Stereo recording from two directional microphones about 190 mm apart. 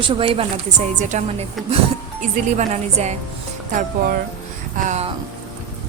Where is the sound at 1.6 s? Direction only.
Centre (ahead or behind).